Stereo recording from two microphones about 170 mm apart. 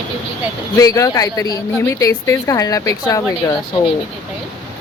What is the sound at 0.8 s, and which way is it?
A woman's voice, 20° left (ahead or behind).